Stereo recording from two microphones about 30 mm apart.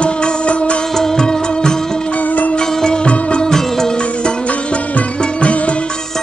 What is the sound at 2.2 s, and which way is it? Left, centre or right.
Music, left.